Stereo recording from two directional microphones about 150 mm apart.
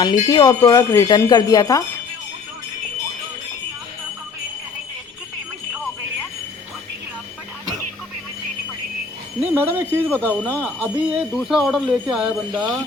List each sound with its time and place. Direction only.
0.0 s speech: 25° left (ahead or behind)
9.7 s speech: 15° right (ahead or behind)
10.1 s speech: 10° left (ahead or behind)
10.8 s speech: 10° right (ahead or behind)
11.4 s jingle bell: centre (ahead or behind)